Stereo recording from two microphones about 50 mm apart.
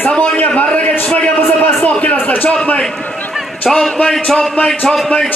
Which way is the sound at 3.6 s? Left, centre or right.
Centre.